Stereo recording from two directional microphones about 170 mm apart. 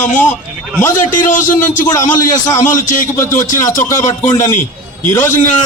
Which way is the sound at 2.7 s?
50° left (ahead or behind).